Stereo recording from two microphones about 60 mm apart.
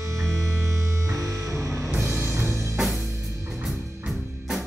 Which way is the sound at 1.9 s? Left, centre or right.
Right.